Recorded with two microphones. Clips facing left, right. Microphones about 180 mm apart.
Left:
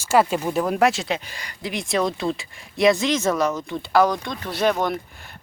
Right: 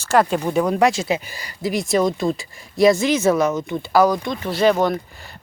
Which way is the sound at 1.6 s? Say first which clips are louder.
Right 7 dB; 40° right (ahead or behind).